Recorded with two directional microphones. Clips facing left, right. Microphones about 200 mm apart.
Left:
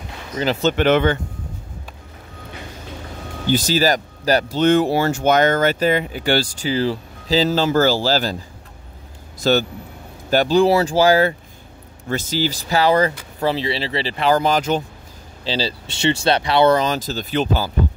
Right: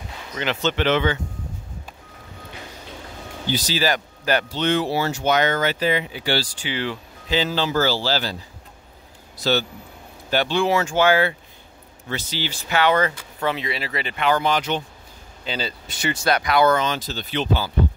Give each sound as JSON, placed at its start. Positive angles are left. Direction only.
{"t": 0.4, "sound": "speech", "side_deg": 40}
{"t": 3.4, "sound": "speech", "side_deg": 50}
{"t": 9.4, "sound": "speech", "side_deg": 45}
{"t": 15.4, "sound": "speech", "side_deg": 30}